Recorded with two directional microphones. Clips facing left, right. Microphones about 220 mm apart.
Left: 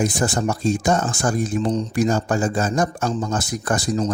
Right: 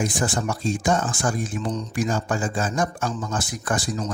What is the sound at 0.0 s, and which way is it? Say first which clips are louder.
Speech: left 4 dB; 40° left (ahead or behind).